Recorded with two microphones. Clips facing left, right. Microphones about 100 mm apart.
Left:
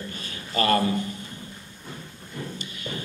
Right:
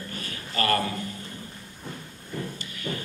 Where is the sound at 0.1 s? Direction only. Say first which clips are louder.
Left 1 dB; 25° left (ahead or behind).